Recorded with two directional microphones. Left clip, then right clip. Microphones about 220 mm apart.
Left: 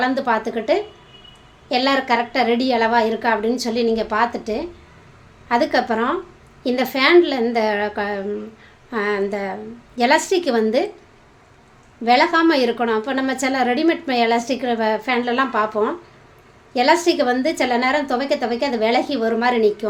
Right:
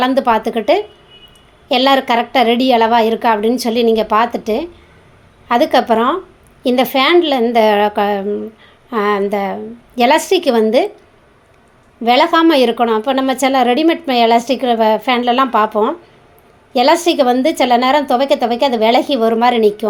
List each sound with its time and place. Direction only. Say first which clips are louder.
0.0 s a woman's voice: right 6 dB; 35° right (ahead or behind)
12.0 s a woman's voice: right 4 dB; 30° right (ahead or behind)